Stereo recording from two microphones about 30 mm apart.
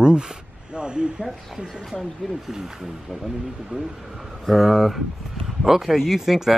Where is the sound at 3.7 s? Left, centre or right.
Right.